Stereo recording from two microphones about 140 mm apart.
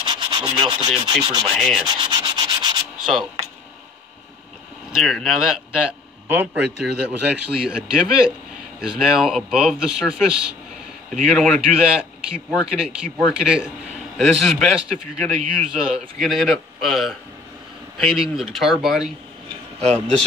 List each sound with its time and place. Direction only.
0.0 s rub: 35° right (ahead or behind)
1.5 s a man's voice: centre (ahead or behind)
1.9 s sanding: 30° right (ahead or behind)
3.0 s a sound: 5° right (ahead or behind)
4.9 s a man's voice: centre (ahead or behind)